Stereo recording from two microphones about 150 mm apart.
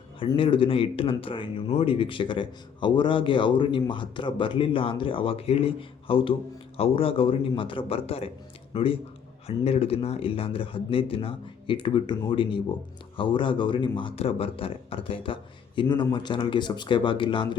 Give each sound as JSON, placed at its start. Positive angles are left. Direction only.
{"t": 0.3, "sound": "speech", "side_deg": 35}